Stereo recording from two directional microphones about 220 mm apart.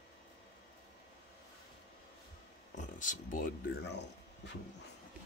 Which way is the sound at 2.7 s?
35° left (ahead or behind).